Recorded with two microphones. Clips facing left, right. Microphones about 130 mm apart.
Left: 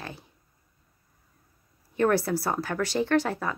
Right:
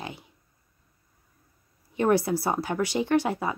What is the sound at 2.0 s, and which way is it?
Speech, 15° right (ahead or behind).